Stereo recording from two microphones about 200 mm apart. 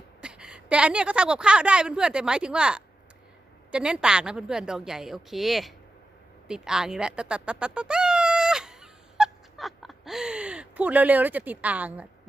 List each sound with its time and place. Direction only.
0.2 s a woman's voice: 5° right (ahead or behind)
6.5 s cat: 5° right (ahead or behind)